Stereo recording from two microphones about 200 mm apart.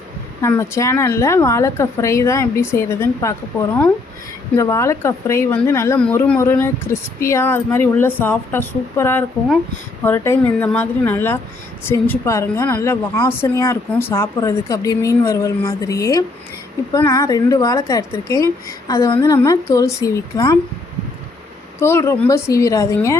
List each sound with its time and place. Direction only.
0.4 s speech: 15° left (ahead or behind)
21.8 s speech: 15° left (ahead or behind)